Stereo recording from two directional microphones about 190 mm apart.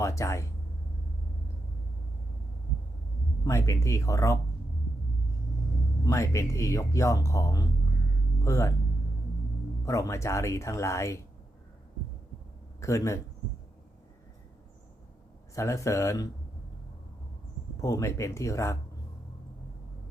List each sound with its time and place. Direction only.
0.0 s speech: 15° left (ahead or behind)
3.4 s speech: 15° left (ahead or behind)
6.1 s speech: 15° left (ahead or behind)
9.8 s speech: 15° left (ahead or behind)
12.8 s speech: 15° left (ahead or behind)
15.5 s speech: 15° left (ahead or behind)
17.7 s speech: 15° left (ahead or behind)